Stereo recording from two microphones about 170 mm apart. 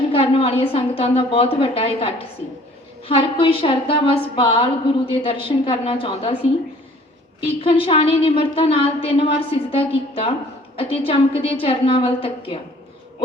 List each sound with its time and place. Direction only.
0.1 s a woman's voice: 35° left (ahead or behind)